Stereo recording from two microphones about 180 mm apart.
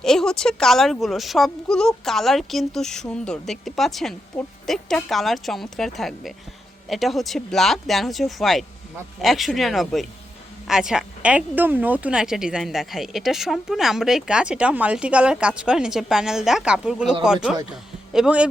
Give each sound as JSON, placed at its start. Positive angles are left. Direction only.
{"t": 0.0, "sound": "speech", "side_deg": 5}